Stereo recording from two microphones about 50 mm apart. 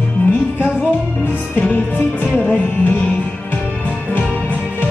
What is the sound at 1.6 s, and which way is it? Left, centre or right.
Music, left.